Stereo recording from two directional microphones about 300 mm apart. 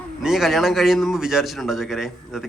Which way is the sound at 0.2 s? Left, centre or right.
Centre.